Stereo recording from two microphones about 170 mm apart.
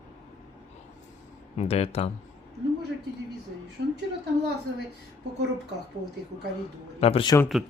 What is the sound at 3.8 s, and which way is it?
Speech, 90° right.